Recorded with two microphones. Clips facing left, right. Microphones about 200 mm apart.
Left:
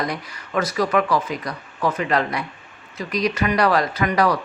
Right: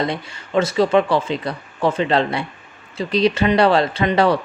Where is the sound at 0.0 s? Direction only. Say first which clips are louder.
Right 4 dB; 25° right (ahead or behind).